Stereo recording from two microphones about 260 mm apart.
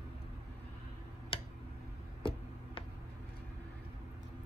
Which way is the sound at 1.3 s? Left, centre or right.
Left.